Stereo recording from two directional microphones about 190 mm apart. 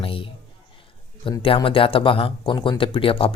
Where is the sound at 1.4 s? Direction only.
30° left (ahead or behind).